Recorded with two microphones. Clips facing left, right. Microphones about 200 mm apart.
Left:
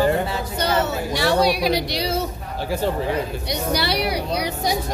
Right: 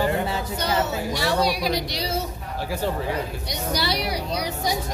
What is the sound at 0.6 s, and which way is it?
A woman's voice, 70° left (ahead or behind).